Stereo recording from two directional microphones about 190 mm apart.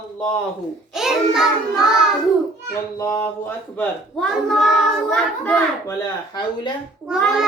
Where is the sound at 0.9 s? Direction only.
Centre (ahead or behind).